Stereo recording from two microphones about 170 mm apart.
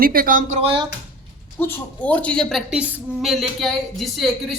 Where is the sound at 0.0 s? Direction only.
60° right (ahead or behind).